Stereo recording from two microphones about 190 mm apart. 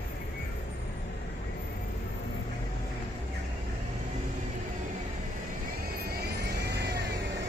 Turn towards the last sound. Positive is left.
turn(degrees=-60)  # may be behind; listen again after turning